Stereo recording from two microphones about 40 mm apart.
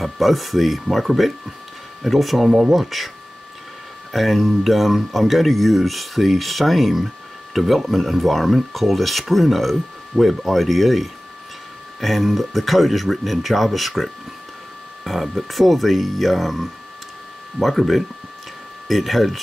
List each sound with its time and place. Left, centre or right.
0.0 s speech: centre
4.1 s speech: centre